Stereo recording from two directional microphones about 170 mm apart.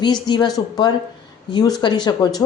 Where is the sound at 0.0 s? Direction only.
25° left (ahead or behind).